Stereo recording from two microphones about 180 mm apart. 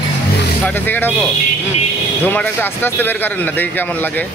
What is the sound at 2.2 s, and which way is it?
Speech, 10° left (ahead or behind).